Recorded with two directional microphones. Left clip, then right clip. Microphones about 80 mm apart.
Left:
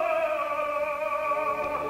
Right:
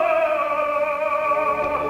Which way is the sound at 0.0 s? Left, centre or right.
Right.